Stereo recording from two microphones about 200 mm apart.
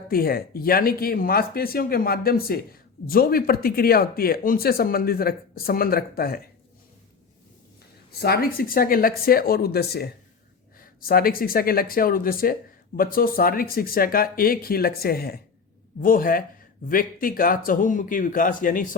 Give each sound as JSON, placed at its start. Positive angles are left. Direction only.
{"t": 0.1, "sound": "speech", "side_deg": 50}
{"t": 8.2, "sound": "speech", "side_deg": 50}